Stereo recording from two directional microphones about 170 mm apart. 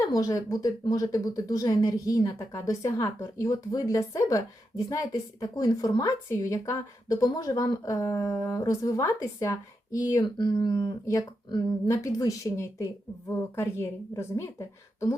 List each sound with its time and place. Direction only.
0.1 s a woman's voice: 20° left (ahead or behind)